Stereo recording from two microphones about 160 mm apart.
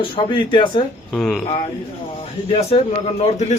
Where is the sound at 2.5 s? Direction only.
40° left (ahead or behind).